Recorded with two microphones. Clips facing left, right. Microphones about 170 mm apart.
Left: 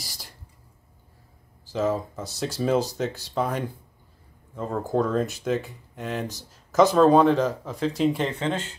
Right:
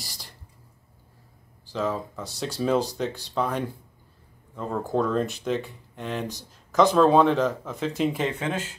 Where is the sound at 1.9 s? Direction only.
40° left (ahead or behind).